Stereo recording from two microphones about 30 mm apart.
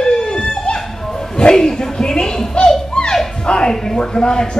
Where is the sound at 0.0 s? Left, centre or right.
Left.